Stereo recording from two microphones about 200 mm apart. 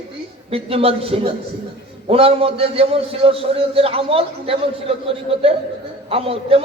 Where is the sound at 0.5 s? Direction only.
30° right (ahead or behind).